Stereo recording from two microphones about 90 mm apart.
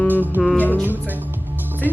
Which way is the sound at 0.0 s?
20° left (ahead or behind).